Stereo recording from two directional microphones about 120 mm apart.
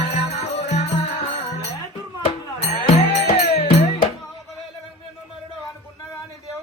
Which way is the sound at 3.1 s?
60° left (ahead or behind).